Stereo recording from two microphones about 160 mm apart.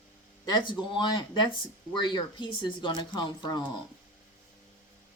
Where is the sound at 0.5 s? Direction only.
30° left (ahead or behind).